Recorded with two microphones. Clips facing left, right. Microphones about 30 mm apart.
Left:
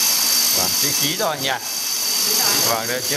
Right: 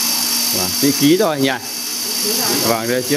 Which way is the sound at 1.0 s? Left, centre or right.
Right.